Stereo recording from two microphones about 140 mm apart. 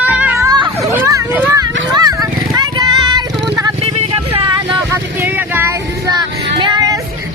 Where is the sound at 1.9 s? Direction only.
25° right (ahead or behind).